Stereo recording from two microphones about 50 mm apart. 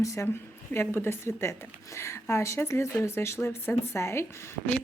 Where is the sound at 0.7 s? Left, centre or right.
Left.